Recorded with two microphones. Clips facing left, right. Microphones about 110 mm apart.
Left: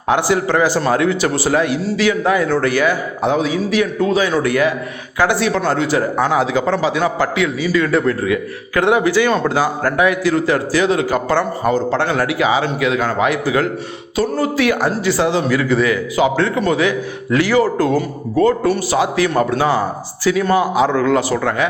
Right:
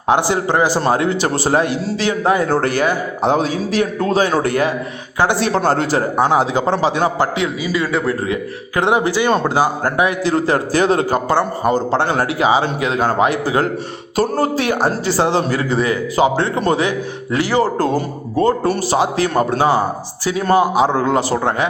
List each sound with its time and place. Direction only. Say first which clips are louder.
0.1 s a man's voice: even; 25° right (ahead or behind)
5.5 s a man's voice: right 1 dB; 40° right (ahead or behind)
6.1 s a man's voice: right 1 dB; 25° right (ahead or behind)
10.7 s speech: right 2 dB; 45° right (ahead or behind)
11.3 s a man's voice: even; 15° right (ahead or behind)
11.7 s a man's voice: even; 30° right (ahead or behind)